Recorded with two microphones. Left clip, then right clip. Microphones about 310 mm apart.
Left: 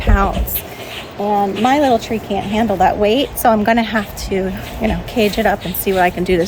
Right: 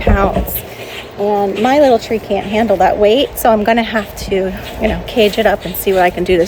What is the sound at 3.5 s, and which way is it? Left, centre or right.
A woman's voice, left.